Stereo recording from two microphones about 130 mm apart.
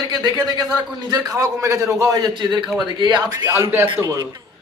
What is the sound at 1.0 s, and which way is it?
A man's voice, 25° right (ahead or behind).